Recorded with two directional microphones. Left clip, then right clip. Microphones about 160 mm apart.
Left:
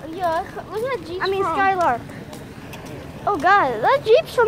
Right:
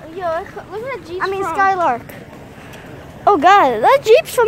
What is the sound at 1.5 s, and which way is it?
Speech, 40° right (ahead or behind).